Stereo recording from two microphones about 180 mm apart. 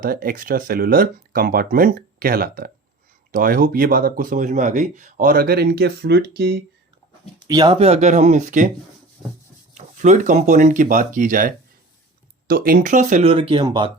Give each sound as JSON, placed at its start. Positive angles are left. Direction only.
{"t": 0.0, "sound": "speech", "side_deg": -50}
{"t": 7.4, "sound": "speech", "side_deg": -25}
{"t": 9.7, "sound": "speech", "side_deg": -40}